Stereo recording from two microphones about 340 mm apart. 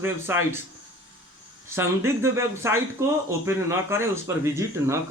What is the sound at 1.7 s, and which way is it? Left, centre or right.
Speech, centre.